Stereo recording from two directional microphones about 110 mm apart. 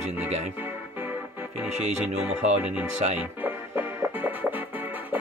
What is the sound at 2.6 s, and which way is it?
Music, 10° right (ahead or behind).